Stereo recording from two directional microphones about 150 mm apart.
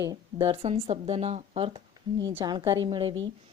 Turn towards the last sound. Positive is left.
turn(degrees=-30)  # may be behind; listen again after turning